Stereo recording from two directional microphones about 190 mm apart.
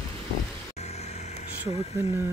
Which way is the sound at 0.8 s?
35° left (ahead or behind).